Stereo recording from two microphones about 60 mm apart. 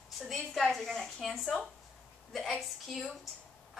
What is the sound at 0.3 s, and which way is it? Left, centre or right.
A woman's voice, centre.